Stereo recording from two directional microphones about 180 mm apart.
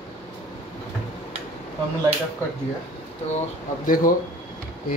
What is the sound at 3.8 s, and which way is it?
Speech, 50° left (ahead or behind).